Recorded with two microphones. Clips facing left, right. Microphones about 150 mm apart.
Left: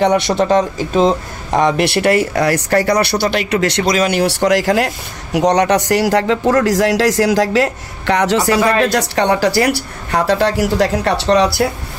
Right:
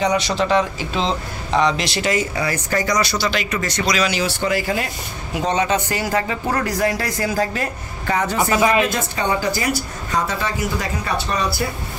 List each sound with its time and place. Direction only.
0.0 s speech: 55° left (ahead or behind); by 3.9 s 70° left (ahead or behind)
3.9 s a man's voice: 55° left (ahead or behind); by 11.7 s 75° left (ahead or behind)